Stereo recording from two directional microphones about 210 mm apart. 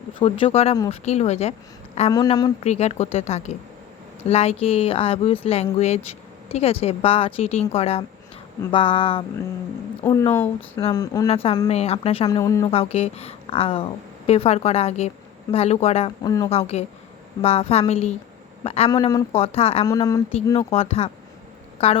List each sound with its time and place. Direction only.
0.1 s speech: 25° left (ahead or behind)
2.0 s speech: 20° left (ahead or behind)
2.6 s speech: 30° left (ahead or behind)
10.0 s speech: 15° left (ahead or behind)
11.7 s speech: 30° left (ahead or behind)
12.4 s speech: 15° left (ahead or behind)
12.7 s speech: 30° left (ahead or behind)
16.5 s speech: 30° left (ahead or behind)
18.9 s speech: 20° left (ahead or behind)
19.9 s speech: 15° left (ahead or behind)
20.7 s speech: 30° left (ahead or behind)